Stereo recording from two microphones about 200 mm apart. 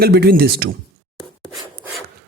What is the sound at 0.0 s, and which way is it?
Speech, 50° right (ahead or behind).